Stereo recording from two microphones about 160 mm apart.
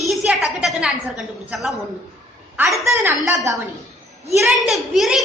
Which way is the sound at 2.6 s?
20° right (ahead or behind).